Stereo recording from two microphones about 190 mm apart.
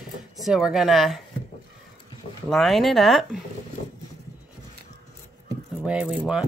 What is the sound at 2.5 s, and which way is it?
Speech, centre (ahead or behind).